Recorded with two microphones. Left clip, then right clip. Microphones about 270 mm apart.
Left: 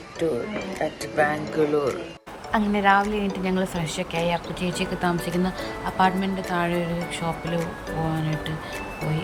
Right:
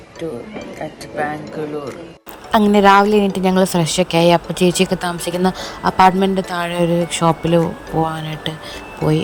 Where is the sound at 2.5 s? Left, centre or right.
Right.